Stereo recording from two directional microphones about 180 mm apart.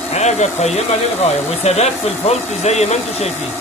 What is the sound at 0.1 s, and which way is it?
Speech, 40° left (ahead or behind).